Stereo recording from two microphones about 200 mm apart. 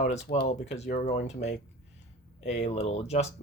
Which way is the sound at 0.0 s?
35° left (ahead or behind).